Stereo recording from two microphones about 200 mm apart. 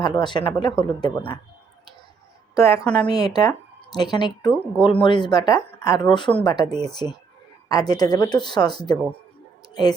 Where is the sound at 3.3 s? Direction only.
20° left (ahead or behind).